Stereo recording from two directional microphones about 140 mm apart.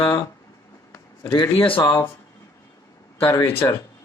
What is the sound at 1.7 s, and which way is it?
Speech, 30° left (ahead or behind).